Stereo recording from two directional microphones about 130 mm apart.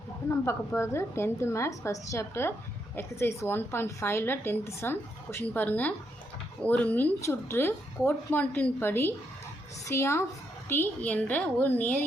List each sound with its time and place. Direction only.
0.3 s a woman's voice: 20° left (ahead or behind)